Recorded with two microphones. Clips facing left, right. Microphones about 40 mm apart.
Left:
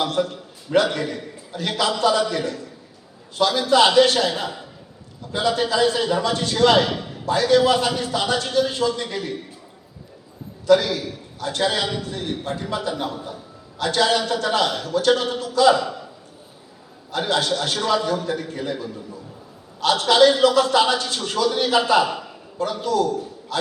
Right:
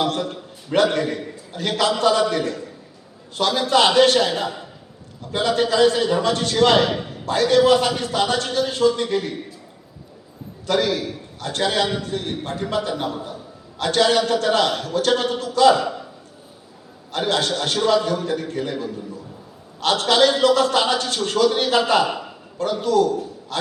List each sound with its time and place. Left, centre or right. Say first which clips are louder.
0.7 s a man's voice: right 1 dB; right
10.7 s a man's voice: left 3 dB; right
17.1 s a man's voice: even; right